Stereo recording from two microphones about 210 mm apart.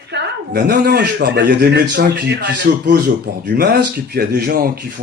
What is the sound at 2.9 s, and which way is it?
Speech, 50° right (ahead or behind).